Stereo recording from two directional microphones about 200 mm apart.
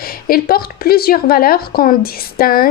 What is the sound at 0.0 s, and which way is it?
Speech, 45° left (ahead or behind).